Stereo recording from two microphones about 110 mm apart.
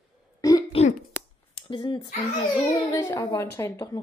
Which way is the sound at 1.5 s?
50° left (ahead or behind).